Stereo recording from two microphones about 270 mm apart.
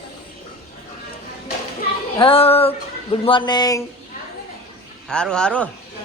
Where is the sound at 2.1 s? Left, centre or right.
Centre.